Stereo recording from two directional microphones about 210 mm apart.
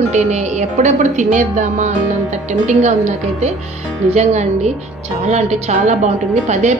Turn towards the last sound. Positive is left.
turn(degrees=-35)  # may be behind; listen again after turning